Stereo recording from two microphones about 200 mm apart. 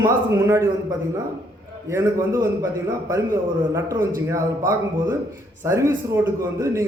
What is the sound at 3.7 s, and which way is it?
A man's voice, 15° right (ahead or behind).